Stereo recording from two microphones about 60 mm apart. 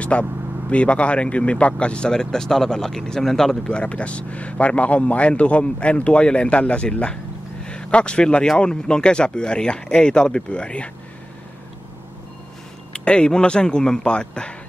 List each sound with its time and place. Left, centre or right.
0.0 s speech: left
12.9 s speech: centre